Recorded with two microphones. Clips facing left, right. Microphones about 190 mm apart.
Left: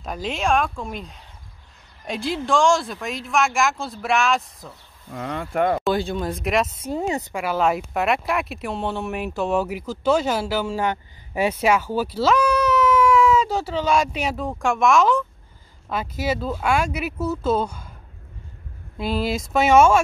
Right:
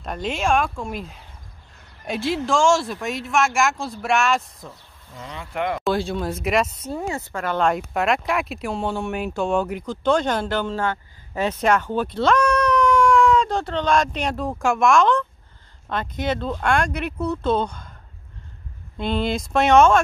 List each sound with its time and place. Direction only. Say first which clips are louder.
0.0 s speech: right 1 dB; centre (ahead or behind)
5.1 s speech: left 6 dB; 55° left (ahead or behind)
5.9 s speech: even; centre (ahead or behind)
6.8 s speech: left 3 dB; 15° left (ahead or behind)
18.9 s speech: right 1 dB; 5° left (ahead or behind)